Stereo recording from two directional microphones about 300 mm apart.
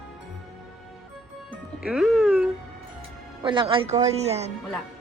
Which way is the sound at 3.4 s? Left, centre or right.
Centre.